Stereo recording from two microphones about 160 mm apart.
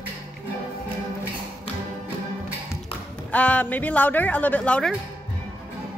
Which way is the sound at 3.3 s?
10° left (ahead or behind).